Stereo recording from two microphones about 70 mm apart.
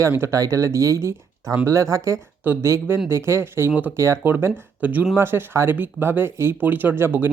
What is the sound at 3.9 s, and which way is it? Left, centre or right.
Speech, right.